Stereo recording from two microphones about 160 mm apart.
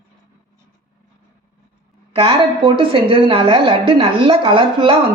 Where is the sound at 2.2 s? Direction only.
35° right (ahead or behind).